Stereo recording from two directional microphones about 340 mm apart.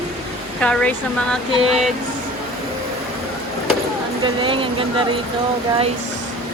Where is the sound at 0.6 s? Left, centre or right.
Centre.